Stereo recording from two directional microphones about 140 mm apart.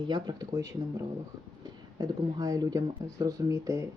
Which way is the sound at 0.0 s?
30° right (ahead or behind).